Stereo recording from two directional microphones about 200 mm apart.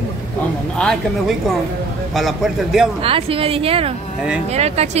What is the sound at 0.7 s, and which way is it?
A man's voice, centre (ahead or behind).